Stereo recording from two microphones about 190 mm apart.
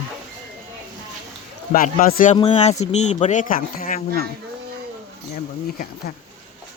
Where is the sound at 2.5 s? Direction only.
35° left (ahead or behind).